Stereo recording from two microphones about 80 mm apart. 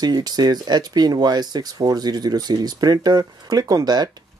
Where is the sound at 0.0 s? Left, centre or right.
Right.